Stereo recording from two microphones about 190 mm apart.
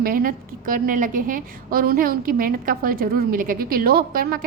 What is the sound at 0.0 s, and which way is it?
A woman's voice, 50° right (ahead or behind).